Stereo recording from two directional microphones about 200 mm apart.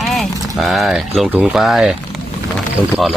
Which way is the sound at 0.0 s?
Centre (ahead or behind).